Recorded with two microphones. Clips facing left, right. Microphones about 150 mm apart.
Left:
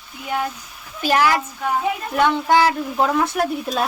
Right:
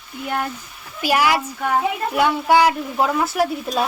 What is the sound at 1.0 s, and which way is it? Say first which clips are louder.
Speech: even; 10° right (ahead or behind).